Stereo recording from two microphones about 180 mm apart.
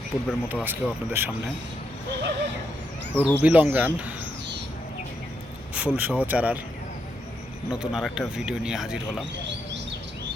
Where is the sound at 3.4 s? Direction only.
10° right (ahead or behind).